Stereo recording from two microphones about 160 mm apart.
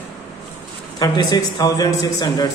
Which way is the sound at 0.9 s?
25° left (ahead or behind).